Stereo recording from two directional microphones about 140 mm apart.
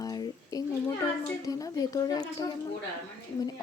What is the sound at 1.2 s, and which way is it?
Speech, 25° left (ahead or behind).